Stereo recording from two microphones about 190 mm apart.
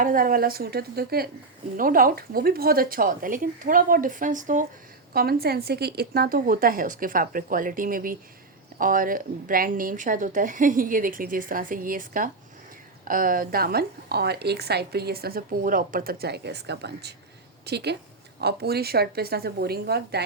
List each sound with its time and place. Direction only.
0.0 s a woman's voice: 45° right (ahead or behind)
5.1 s a woman's voice: 50° right (ahead or behind)